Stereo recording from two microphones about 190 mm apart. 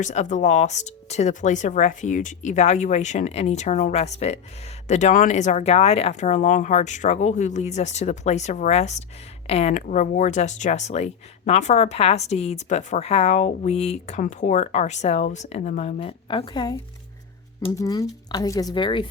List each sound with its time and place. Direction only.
0.0 s speech: 40° left (ahead or behind); by 16.7 s 25° left (ahead or behind)
17.7 s speech: 20° left (ahead or behind)